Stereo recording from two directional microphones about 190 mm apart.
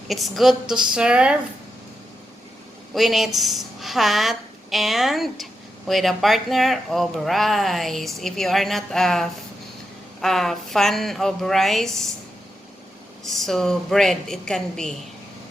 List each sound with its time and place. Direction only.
0.1 s speech: centre (ahead or behind)
2.9 s a woman's voice: centre (ahead or behind)
13.2 s speech: centre (ahead or behind)